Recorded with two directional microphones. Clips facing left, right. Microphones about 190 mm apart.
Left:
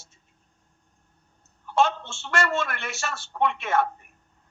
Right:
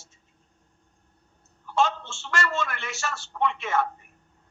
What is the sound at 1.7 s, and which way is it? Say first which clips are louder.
A woman's voice: left 2 dB; 60° left (ahead or behind).